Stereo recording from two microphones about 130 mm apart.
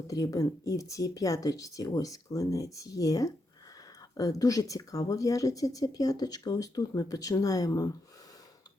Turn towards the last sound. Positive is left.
turn(degrees=25)  # may be behind; listen again after turning